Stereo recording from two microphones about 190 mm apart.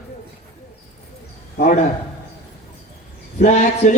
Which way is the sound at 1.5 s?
45° left (ahead or behind).